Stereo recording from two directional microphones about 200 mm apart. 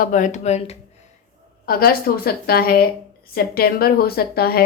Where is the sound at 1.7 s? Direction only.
50° left (ahead or behind).